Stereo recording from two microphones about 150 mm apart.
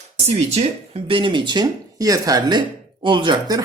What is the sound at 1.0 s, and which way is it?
Speech, 35° right (ahead or behind).